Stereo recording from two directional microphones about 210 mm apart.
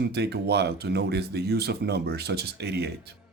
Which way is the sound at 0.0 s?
50° right (ahead or behind).